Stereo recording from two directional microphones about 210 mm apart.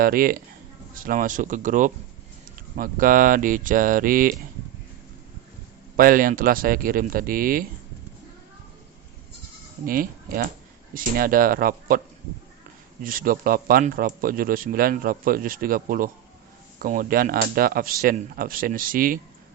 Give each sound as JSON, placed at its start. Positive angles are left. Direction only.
{"t": 0.0, "sound": "speech", "side_deg": -45}
{"t": 6.0, "sound": "speech", "side_deg": -40}
{"t": 9.8, "sound": "speech", "side_deg": -40}
{"t": 13.0, "sound": "speech", "side_deg": -40}